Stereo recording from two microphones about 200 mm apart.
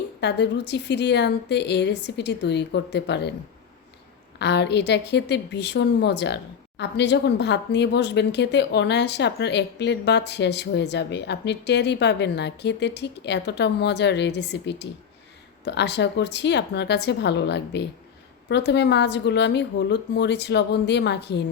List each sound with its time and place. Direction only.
0.2 s a woman's voice: 60° left (ahead or behind)
4.4 s a woman's voice: 60° left (ahead or behind)